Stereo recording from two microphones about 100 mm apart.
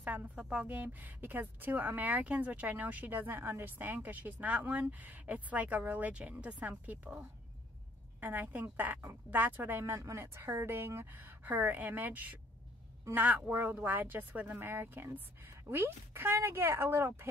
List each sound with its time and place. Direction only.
0.0 s a woman's voice: 15° right (ahead or behind)